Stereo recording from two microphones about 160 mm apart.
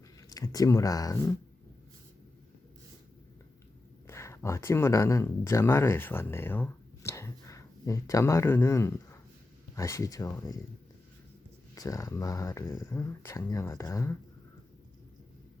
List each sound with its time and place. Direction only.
0.2 s speech: 20° left (ahead or behind)
4.0 s speech: 15° left (ahead or behind)
11.7 s speech: 20° left (ahead or behind)